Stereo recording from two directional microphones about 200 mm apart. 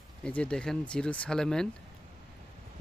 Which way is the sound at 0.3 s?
5° left (ahead or behind).